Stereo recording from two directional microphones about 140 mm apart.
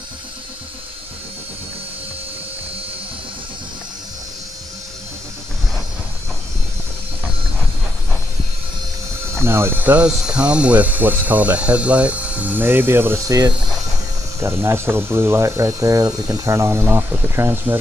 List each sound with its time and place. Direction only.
9.3 s speech: 20° right (ahead or behind)